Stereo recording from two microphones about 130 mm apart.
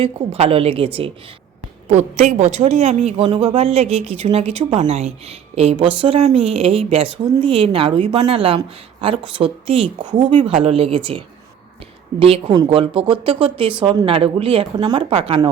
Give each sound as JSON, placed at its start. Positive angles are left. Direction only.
{"t": 0.0, "sound": "speech", "side_deg": -50}
{"t": 1.9, "sound": "a woman's voice", "side_deg": -65}
{"t": 3.2, "sound": "speech", "side_deg": -45}
{"t": 12.2, "sound": "speech", "side_deg": -45}